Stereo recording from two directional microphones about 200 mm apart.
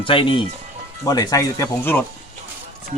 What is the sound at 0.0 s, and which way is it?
Speech, 25° left (ahead or behind).